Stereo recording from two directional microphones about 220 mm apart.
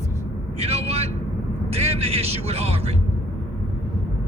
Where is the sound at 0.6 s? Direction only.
25° right (ahead or behind).